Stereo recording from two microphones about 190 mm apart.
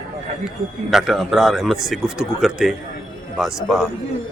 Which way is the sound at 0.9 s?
Centre (ahead or behind).